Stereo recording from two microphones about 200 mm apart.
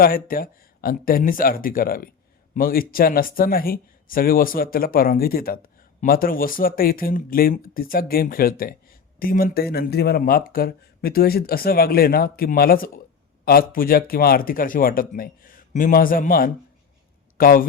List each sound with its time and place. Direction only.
0.0 s speech: 45° left (ahead or behind)